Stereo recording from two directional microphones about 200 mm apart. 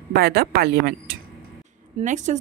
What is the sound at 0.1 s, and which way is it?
Speech, 50° right (ahead or behind).